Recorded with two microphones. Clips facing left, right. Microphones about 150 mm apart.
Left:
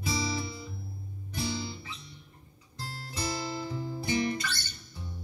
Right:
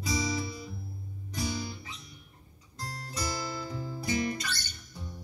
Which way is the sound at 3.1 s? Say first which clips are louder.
Left 2 dB; 25° left (ahead or behind).